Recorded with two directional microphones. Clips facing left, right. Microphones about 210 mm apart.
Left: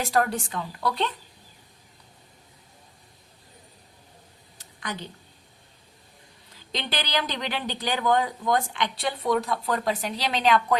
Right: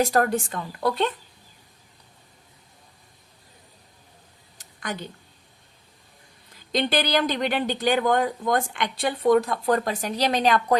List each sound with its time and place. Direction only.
0.0 s speech: 45° right (ahead or behind)
4.8 s speech: 50° right (ahead or behind)
6.7 s speech: 50° right (ahead or behind)